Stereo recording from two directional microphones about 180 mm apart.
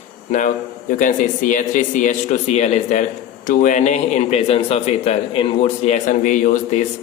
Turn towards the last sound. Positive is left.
turn(degrees=45)  # may be behind; listen again after turning